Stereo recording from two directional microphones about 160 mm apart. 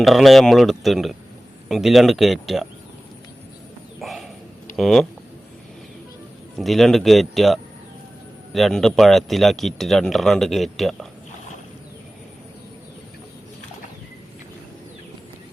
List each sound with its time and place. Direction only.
0.0 s speech: centre (ahead or behind)
4.0 s bird: centre (ahead or behind)
4.8 s speech: centre (ahead or behind)
6.6 s speech: centre (ahead or behind)